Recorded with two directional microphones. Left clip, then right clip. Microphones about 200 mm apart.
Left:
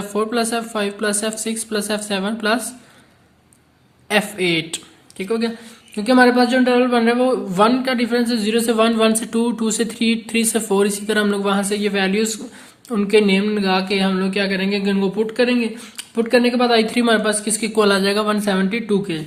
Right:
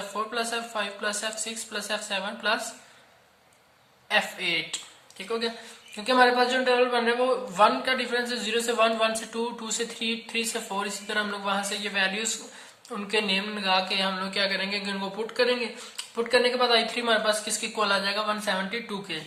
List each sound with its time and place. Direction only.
0.1 s speech: 50° left (ahead or behind)
4.1 s speech: 45° left (ahead or behind)